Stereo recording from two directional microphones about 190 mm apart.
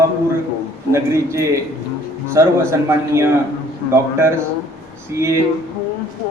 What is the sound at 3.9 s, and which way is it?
Speech, 15° right (ahead or behind).